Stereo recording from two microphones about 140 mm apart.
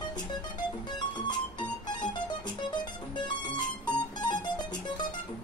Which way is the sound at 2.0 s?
30° left (ahead or behind).